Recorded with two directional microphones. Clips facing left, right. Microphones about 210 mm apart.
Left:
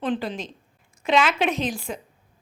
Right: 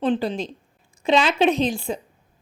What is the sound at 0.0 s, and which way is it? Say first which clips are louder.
A woman's voice: right 4 dB; 30° right (ahead or behind).